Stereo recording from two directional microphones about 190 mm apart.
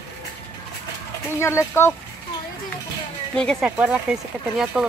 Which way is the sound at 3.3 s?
5° left (ahead or behind).